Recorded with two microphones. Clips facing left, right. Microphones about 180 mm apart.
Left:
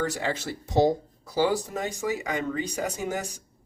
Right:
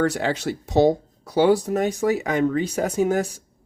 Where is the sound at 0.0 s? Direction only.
70° right (ahead or behind).